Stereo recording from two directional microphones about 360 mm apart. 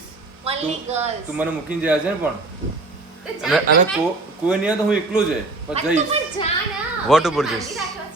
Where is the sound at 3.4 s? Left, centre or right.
Centre.